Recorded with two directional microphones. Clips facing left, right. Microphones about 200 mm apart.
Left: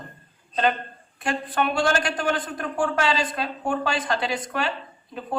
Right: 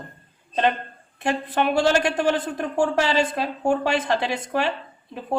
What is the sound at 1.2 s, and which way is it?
A woman's voice, 25° right (ahead or behind).